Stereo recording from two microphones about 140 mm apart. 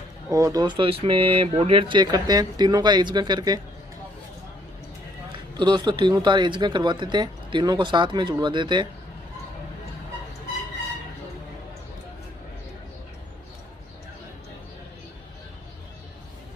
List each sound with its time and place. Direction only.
0.3 s speech: 25° right (ahead or behind)
5.3 s speech: 30° right (ahead or behind)